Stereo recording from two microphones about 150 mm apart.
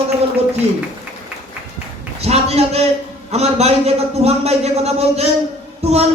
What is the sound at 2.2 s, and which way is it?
A man's voice, 45° right (ahead or behind).